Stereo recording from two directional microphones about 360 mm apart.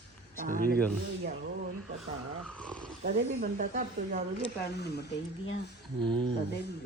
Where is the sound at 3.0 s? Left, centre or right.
Right.